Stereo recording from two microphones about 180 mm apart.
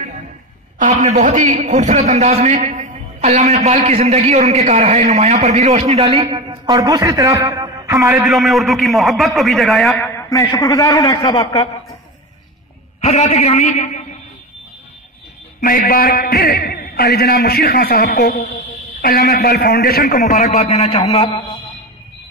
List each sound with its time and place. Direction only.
1.0 s a man's voice: 40° right (ahead or behind)
6.2 s a man's voice: 25° right (ahead or behind)
8.2 s a man's voice: centre (ahead or behind)
9.9 s a man's voice: 10° left (ahead or behind)
13.0 s a man's voice: 35° left (ahead or behind)
15.6 s a man's voice: 55° left (ahead or behind)
20.2 s a man's voice: 40° left (ahead or behind)